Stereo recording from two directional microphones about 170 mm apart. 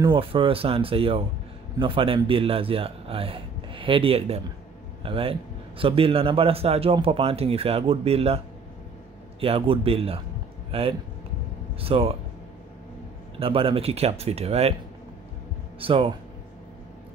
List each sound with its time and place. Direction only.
0.0 s speech: 30° right (ahead or behind)
9.4 s speech: 35° right (ahead or behind)
13.4 s speech: 35° right (ahead or behind)
15.8 s speech: 30° right (ahead or behind)